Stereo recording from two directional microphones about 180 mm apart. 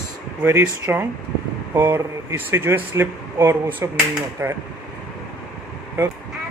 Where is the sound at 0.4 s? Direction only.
10° right (ahead or behind).